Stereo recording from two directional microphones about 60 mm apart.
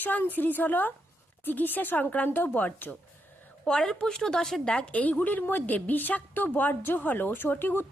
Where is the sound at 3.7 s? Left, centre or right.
Centre; by 7.8 s left.